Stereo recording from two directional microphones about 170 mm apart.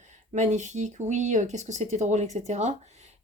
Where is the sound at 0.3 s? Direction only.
45° right (ahead or behind).